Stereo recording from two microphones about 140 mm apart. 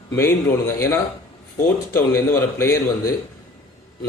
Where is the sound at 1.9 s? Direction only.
15° left (ahead or behind).